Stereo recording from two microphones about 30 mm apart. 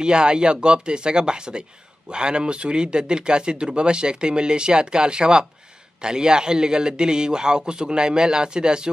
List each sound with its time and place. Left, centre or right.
0.0 s a man's voice: right